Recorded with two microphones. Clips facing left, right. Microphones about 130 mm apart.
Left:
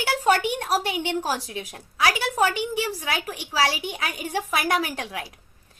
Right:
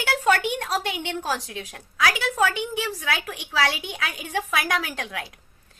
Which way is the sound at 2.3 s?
10° left (ahead or behind).